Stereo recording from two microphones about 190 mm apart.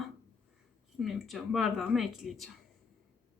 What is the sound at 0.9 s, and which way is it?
Speech, centre (ahead or behind).